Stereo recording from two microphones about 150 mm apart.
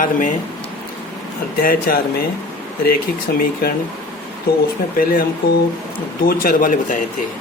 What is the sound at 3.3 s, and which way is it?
Speech, 90° left.